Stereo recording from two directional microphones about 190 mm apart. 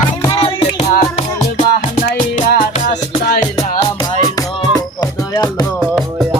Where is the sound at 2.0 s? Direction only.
55° left (ahead or behind).